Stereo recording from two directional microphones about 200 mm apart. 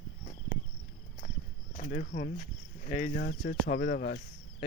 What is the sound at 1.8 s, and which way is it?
Speech, 45° left (ahead or behind).